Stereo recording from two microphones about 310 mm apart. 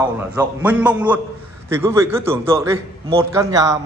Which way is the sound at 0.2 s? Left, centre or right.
Centre.